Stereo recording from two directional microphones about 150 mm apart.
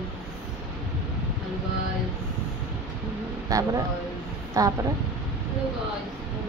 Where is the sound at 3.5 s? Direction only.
20° right (ahead or behind).